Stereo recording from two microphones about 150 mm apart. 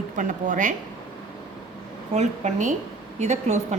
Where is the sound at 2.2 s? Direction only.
50° right (ahead or behind).